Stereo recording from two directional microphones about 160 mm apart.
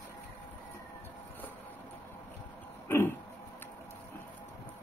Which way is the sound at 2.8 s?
15° left (ahead or behind).